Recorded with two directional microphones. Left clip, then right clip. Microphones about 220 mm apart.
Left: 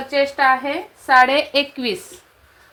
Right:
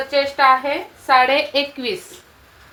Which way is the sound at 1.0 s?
45° left (ahead or behind).